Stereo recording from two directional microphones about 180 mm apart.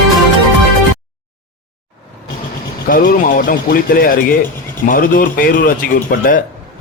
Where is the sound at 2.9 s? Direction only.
50° left (ahead or behind).